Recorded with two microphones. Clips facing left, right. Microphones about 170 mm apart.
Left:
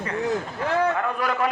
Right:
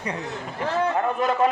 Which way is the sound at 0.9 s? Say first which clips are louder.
Right 3 dB; 20° right (ahead or behind).